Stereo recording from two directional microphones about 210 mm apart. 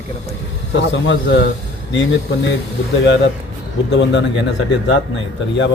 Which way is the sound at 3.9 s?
60° left (ahead or behind).